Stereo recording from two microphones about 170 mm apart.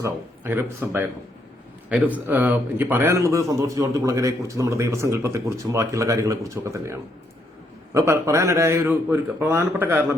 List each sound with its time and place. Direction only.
0.0 s a man's voice: 10° right (ahead or behind)